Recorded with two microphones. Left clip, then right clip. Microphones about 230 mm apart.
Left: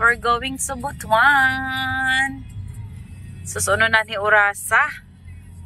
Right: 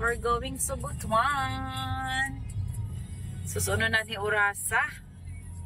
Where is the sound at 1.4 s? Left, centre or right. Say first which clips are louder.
Left 14 dB; centre.